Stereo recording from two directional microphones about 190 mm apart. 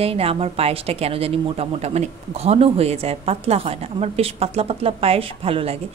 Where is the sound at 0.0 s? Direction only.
30° right (ahead or behind).